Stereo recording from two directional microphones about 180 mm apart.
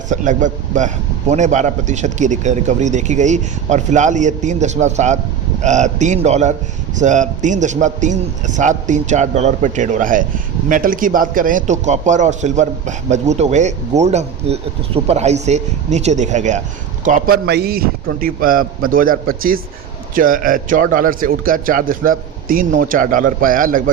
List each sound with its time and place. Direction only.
0.1 s a man's voice: 45° right (ahead or behind)